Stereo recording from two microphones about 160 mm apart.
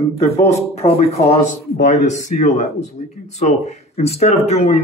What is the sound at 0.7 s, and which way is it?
Speech, 40° left (ahead or behind).